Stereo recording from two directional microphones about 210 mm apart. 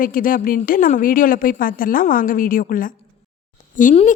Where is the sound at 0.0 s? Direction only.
40° left (ahead or behind).